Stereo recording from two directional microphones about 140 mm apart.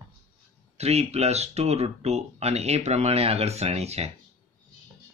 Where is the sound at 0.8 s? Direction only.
50° right (ahead or behind).